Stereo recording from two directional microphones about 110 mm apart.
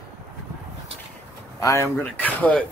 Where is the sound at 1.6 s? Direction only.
30° left (ahead or behind).